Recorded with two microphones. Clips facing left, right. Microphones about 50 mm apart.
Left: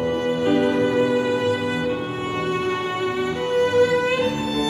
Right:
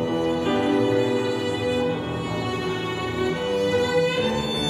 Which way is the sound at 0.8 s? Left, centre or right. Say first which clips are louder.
Left 2 dB; left.